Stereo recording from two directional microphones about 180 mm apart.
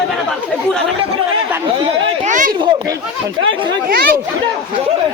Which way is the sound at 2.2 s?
45° right (ahead or behind).